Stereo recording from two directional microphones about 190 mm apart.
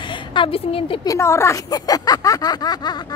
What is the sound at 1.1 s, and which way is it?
Speech, 15° left (ahead or behind).